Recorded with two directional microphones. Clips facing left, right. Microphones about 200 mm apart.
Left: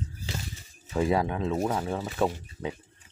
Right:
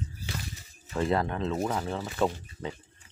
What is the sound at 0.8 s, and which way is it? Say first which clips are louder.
Speech: left 2 dB; 10° left (ahead or behind).